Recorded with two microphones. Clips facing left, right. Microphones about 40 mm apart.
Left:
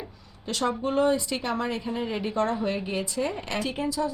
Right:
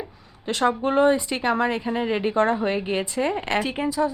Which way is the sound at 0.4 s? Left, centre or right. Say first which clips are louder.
Right 5 dB; right.